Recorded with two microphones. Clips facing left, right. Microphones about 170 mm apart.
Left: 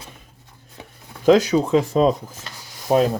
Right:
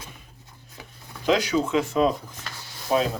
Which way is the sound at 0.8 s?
25° left (ahead or behind).